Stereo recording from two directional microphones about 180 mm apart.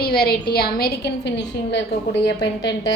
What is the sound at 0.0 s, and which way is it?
A woman's voice, 60° left (ahead or behind).